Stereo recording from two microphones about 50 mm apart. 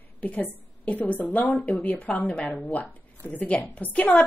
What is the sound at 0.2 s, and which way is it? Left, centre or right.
A woman's voice, left.